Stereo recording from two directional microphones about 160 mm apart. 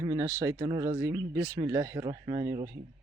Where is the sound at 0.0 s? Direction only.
20° right (ahead or behind).